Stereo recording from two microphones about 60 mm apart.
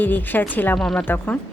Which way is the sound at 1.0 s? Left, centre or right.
Left.